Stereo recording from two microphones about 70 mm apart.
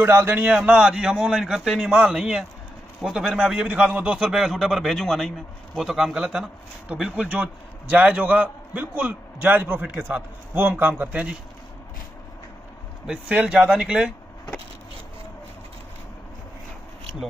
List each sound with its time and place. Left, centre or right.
0.0 s a man's voice: right
0.6 s a man's voice: centre
13.5 s a man's voice: centre